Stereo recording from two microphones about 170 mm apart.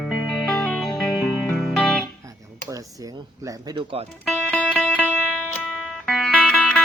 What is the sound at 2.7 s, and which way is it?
Speech, 20° right (ahead or behind).